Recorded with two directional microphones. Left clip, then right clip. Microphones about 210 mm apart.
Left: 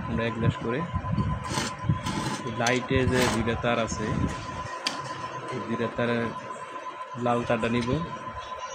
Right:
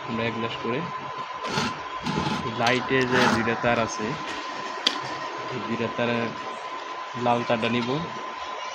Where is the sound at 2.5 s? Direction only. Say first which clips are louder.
Right 3 dB; 30° left (ahead or behind).